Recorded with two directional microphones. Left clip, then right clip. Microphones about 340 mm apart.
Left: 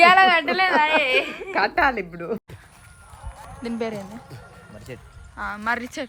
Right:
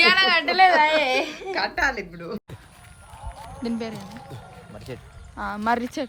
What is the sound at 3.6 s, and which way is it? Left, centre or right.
Speech, centre.